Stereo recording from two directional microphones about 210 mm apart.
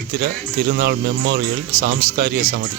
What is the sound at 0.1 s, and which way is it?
A man's voice, 50° right (ahead or behind).